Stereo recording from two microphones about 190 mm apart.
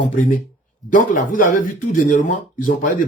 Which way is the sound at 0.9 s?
45° left (ahead or behind).